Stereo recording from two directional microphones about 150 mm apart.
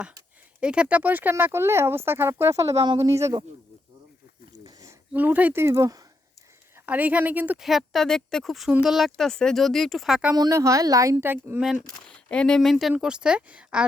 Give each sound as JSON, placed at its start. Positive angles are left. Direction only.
{"t": 0.6, "sound": "speech", "side_deg": -5}
{"t": 4.6, "sound": "a sound", "side_deg": -20}
{"t": 5.1, "sound": "speech", "side_deg": -10}
{"t": 6.7, "sound": "speech", "side_deg": -10}
{"t": 10.3, "sound": "speech", "side_deg": -25}
{"t": 12.1, "sound": "speech", "side_deg": 5}